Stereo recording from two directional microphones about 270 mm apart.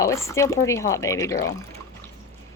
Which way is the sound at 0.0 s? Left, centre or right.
Centre.